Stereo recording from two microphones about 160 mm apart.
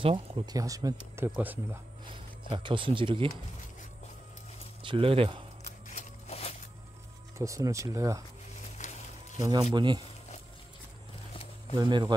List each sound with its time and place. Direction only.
0.0 s speech: 30° right (ahead or behind); by 1.8 s 10° right (ahead or behind)
2.0 s speech: 30° right (ahead or behind)
4.8 s speech: 35° right (ahead or behind)
5.9 s a sound: 45° left (ahead or behind)
7.3 s speech: 20° right (ahead or behind)
8.8 s a sound: 50° left (ahead or behind)
9.4 s speech: 25° right (ahead or behind)
11.7 s speech: 25° right (ahead or behind)